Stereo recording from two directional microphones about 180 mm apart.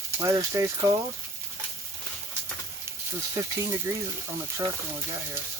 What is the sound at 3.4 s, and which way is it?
Speech, 15° right (ahead or behind).